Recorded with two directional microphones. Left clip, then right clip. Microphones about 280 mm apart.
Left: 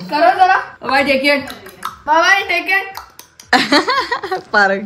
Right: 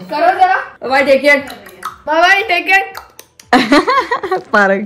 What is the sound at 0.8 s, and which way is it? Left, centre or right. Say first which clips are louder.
Speech: right 4 dB; centre.